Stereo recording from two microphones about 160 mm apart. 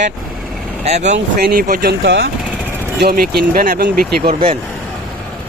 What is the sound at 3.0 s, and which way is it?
Speech, 75° right (ahead or behind).